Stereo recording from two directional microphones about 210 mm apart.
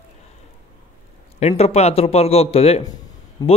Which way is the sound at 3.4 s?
20° left (ahead or behind).